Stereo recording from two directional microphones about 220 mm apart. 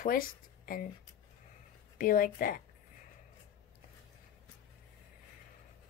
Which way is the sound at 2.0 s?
40° left (ahead or behind).